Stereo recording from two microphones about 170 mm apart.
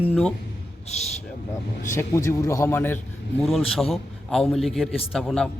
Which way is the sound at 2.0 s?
15° left (ahead or behind).